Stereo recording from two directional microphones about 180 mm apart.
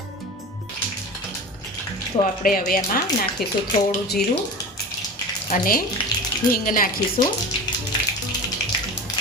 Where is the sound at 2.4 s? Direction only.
50° left (ahead or behind).